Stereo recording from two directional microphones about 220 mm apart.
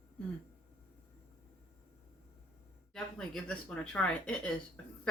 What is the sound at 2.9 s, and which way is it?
Speech, centre (ahead or behind).